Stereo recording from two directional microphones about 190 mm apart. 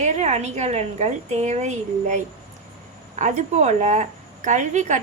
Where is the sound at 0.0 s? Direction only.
35° right (ahead or behind).